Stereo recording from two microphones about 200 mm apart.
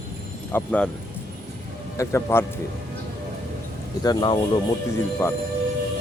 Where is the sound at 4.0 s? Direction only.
20° left (ahead or behind).